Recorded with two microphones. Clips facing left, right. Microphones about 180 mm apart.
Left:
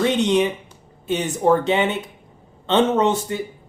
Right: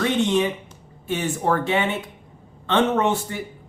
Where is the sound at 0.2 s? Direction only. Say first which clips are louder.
Left 2 dB; 20° left (ahead or behind).